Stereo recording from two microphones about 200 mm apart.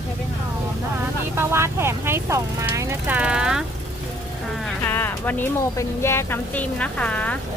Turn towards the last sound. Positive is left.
turn(degrees=5)  # may be behind; listen again after turning